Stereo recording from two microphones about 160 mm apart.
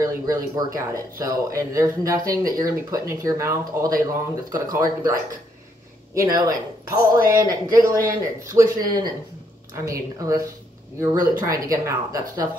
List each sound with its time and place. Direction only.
0.0 s speech: 20° right (ahead or behind)
6.1 s speech: 20° right (ahead or behind)